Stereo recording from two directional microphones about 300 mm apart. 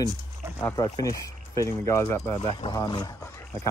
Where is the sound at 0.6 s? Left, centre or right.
Centre.